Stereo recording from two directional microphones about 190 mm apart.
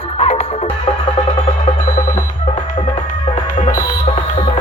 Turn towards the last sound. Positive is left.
turn(degrees=45)  # may be behind; listen again after turning